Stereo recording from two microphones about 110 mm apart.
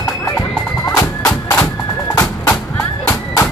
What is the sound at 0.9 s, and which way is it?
Bagpipes, 35° left (ahead or behind).